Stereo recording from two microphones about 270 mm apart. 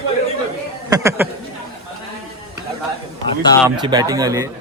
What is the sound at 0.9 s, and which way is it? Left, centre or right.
Speech, centre.